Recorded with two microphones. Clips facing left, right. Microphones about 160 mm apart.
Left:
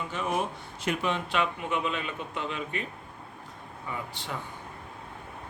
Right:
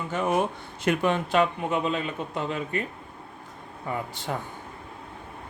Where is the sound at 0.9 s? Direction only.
50° right (ahead or behind).